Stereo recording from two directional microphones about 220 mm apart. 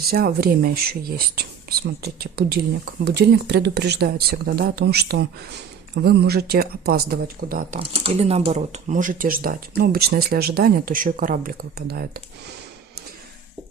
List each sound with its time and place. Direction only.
0.1 s speech: 45° right (ahead or behind)
7.8 s speech: 25° right (ahead or behind); by 12.2 s 45° right (ahead or behind)